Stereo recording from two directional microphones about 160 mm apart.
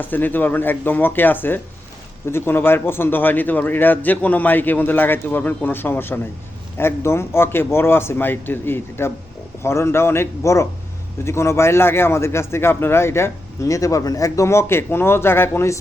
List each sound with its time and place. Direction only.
0.0 s speech: 10° left (ahead or behind)